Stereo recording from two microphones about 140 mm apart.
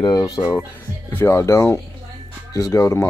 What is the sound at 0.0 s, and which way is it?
Speech, 30° left (ahead or behind).